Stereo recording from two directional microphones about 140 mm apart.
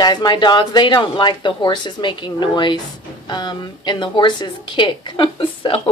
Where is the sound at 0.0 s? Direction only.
30° left (ahead or behind).